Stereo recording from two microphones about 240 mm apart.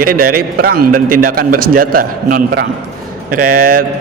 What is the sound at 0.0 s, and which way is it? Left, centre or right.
A man's voice, right.